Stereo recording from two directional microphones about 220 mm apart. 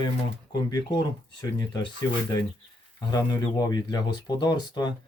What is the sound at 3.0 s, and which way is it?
Speech, 20° left (ahead or behind).